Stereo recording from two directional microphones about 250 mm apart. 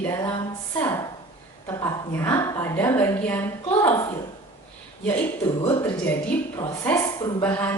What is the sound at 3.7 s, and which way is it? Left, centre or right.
Speech, left.